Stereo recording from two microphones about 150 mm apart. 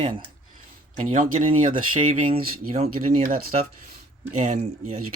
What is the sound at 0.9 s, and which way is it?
Speech, 60° right (ahead or behind).